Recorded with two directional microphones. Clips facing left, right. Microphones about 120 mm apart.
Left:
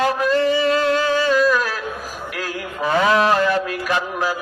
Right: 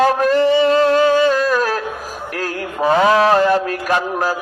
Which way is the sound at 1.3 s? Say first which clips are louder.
Right 1 dB; 45° right (ahead or behind).